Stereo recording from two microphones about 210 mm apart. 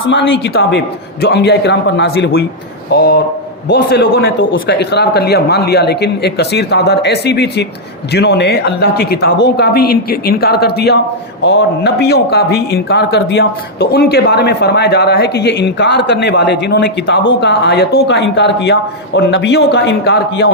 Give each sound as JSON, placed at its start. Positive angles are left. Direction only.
{"t": 0.1, "sound": "speech", "side_deg": 55}